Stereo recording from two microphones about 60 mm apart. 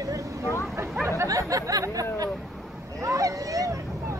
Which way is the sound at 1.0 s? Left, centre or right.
Right.